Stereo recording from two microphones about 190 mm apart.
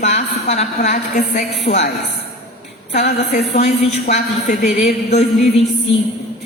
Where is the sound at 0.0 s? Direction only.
35° left (ahead or behind).